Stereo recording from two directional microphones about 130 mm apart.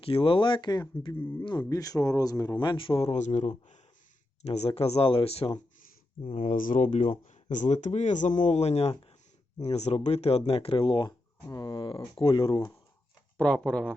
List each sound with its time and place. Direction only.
0.0 s a man's voice: 45° left (ahead or behind)
1.1 s speech: 15° left (ahead or behind)
1.5 s a man's voice: 30° left (ahead or behind); by 3.5 s 65° left (ahead or behind)
4.4 s speech: 55° left (ahead or behind)
6.6 s a man's voice: 80° left; by 12.5 s 40° left (ahead or behind)
13.3 s speech: 10° left (ahead or behind)